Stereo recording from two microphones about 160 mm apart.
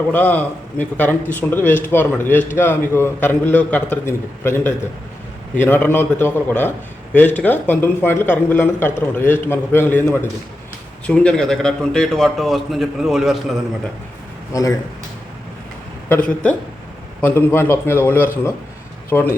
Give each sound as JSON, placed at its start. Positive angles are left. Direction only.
{"t": 0.1, "sound": "speech", "side_deg": 10}
{"t": 11.0, "sound": "a man's voice", "side_deg": 5}
{"t": 14.5, "sound": "speech", "side_deg": 20}
{"t": 16.0, "sound": "speech", "side_deg": 10}